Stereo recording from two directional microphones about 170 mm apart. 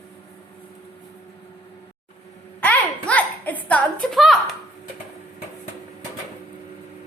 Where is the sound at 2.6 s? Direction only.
10° left (ahead or behind).